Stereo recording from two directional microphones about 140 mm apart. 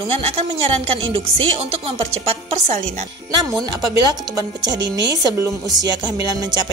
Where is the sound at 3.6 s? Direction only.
30° right (ahead or behind).